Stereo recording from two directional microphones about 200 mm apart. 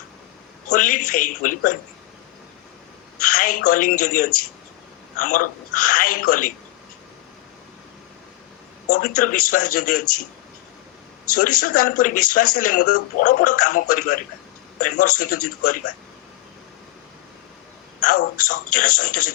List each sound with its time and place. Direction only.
0.7 s speech: 40° left (ahead or behind)
3.2 s a woman's voice: 40° left (ahead or behind)
8.9 s speech: 40° left (ahead or behind)
11.3 s speech: 40° left (ahead or behind)
18.0 s speech: 40° left (ahead or behind)